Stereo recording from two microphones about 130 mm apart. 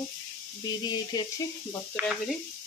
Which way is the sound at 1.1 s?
30° left (ahead or behind).